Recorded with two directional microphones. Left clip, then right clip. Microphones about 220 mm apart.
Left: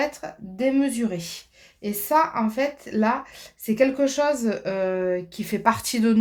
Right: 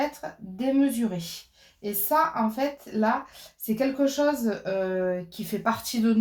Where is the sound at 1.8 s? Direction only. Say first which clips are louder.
Left 3 dB; 45° left (ahead or behind).